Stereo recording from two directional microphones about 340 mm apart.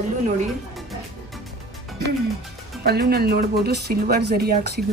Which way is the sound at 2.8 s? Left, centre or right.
Right.